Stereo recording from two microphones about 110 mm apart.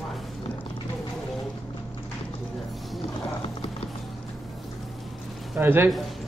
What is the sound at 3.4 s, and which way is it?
Music, 60° left (ahead or behind).